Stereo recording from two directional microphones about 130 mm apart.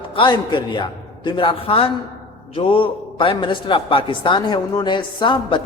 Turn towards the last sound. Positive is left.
turn(degrees=40)  # may be behind; listen again after turning